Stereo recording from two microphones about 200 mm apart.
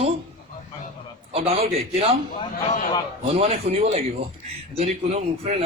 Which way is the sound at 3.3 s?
30° right (ahead or behind).